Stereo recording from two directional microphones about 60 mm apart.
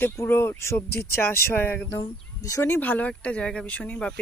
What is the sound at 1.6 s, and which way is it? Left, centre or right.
Speech, left.